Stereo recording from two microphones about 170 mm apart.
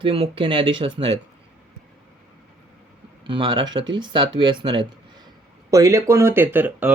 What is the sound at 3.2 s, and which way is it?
Speech, 30° right (ahead or behind).